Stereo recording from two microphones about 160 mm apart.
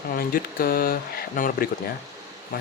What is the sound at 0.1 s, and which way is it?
Speech, 65° left (ahead or behind).